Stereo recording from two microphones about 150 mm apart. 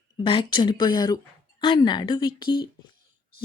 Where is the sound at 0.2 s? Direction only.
35° left (ahead or behind).